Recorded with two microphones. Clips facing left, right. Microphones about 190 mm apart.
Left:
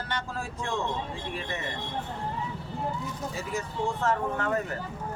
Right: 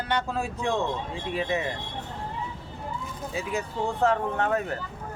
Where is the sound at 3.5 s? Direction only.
65° right (ahead or behind).